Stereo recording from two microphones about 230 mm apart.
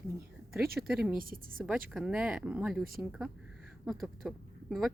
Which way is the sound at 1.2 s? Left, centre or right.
Right.